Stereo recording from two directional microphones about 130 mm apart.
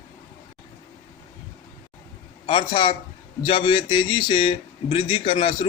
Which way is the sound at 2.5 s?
40° left (ahead or behind).